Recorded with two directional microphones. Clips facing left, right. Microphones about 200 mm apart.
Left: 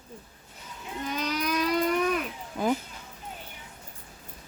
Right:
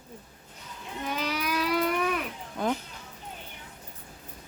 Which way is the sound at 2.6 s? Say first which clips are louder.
Left 2 dB; 5° left (ahead or behind).